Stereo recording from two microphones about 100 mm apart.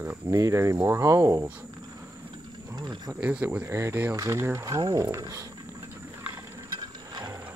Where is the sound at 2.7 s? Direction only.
45° right (ahead or behind).